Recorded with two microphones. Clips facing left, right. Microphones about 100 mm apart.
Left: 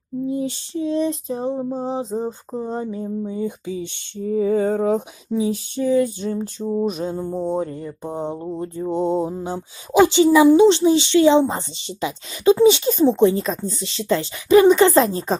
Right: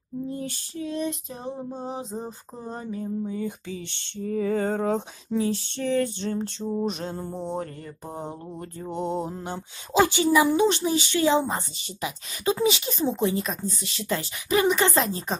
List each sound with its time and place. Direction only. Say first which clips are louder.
0.3 s mantra: left 9 dB; 20° left (ahead or behind)
6.6 s a sound: left 8 dB; 10° left (ahead or behind)
7.3 s mantra: left 8 dB; 15° left (ahead or behind); by 15.3 s 35° left (ahead or behind)